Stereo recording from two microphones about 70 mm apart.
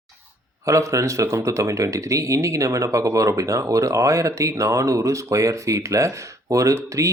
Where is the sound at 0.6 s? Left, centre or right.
Right.